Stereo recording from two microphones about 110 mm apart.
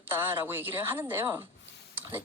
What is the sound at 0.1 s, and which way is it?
A woman's voice, 20° right (ahead or behind).